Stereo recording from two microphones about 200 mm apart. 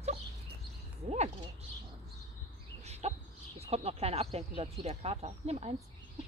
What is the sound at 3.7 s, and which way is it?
Speech, 30° right (ahead or behind).